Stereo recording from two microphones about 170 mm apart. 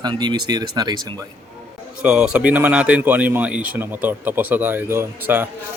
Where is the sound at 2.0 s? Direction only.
5° right (ahead or behind).